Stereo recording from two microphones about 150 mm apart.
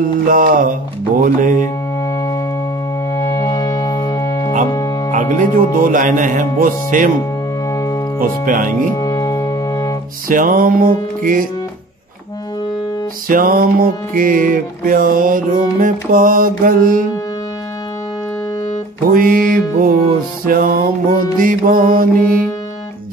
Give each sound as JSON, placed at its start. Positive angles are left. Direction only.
{"t": 0.3, "sound": "speech", "side_deg": -65}
{"t": 2.0, "sound": "music", "side_deg": 25}
{"t": 5.1, "sound": "speech", "side_deg": -60}
{"t": 7.7, "sound": "music", "side_deg": 20}
{"t": 8.2, "sound": "music", "side_deg": -70}
{"t": 8.9, "sound": "brass instrument", "side_deg": 25}
{"t": 10.2, "sound": "music", "side_deg": -65}
{"t": 13.3, "sound": "music", "side_deg": -70}
{"t": 19.0, "sound": "music", "side_deg": -70}